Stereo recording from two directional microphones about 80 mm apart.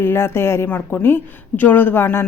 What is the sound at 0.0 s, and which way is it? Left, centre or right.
A woman's voice, left.